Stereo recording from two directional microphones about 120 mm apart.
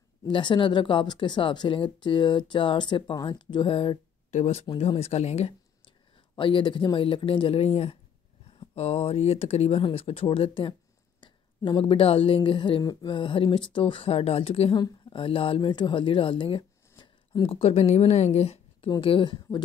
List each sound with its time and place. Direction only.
0.3 s speech: 40° left (ahead or behind)
4.3 s speech: 65° left (ahead or behind)
6.3 s speech: 45° left (ahead or behind)
16.9 s speech: 40° left (ahead or behind); by 18.9 s 60° left (ahead or behind)
18.9 s speech: 45° left (ahead or behind)